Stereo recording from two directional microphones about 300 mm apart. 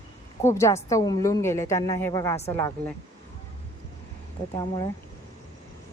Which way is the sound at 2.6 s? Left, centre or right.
Centre.